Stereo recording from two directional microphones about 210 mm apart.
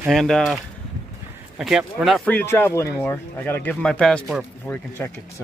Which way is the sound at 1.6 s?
5° right (ahead or behind).